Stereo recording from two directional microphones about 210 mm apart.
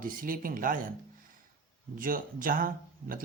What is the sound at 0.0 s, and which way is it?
Speech, 40° right (ahead or behind).